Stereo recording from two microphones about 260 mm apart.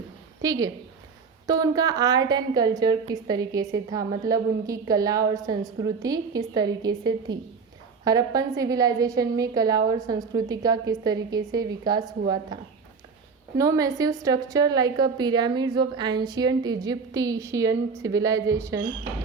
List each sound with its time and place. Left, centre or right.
0.4 s a woman's voice: centre